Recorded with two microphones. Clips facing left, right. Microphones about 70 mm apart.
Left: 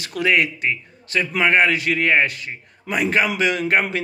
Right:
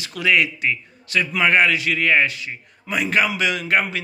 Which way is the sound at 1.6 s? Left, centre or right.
Left.